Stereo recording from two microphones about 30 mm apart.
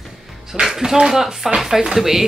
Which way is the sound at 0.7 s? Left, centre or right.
Centre.